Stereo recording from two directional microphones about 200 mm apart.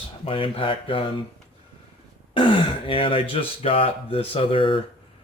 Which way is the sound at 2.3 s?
25° left (ahead or behind).